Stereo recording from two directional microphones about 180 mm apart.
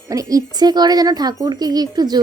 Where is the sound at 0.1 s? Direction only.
20° right (ahead or behind).